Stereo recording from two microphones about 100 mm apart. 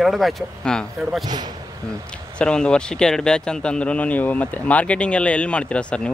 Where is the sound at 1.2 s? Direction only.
45° right (ahead or behind).